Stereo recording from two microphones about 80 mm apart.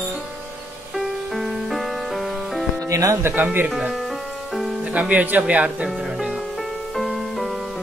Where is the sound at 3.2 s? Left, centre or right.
Right.